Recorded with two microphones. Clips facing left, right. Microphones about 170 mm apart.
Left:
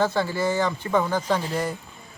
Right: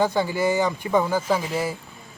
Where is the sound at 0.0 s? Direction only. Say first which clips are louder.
Right 2 dB; 15° right (ahead or behind).